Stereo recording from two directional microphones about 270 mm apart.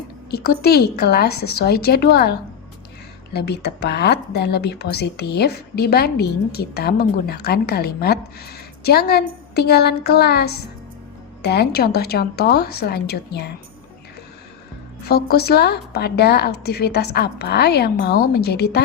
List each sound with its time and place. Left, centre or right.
0.3 s a woman's voice: left
15.0 s a woman's voice: left